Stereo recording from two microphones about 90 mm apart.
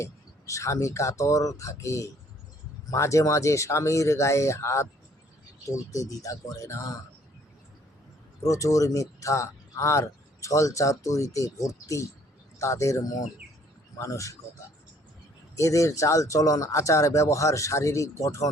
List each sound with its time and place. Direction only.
0.0 s speech: 35° left (ahead or behind)
8.4 s speech: 40° left (ahead or behind)
15.5 s speech: 35° left (ahead or behind)